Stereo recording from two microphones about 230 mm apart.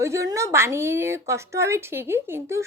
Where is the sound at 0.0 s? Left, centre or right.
Centre.